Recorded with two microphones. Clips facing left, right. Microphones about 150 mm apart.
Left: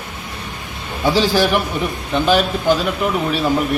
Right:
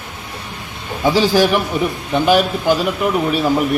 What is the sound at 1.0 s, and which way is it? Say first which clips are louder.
Speech: right 2 dB; 15° right (ahead or behind).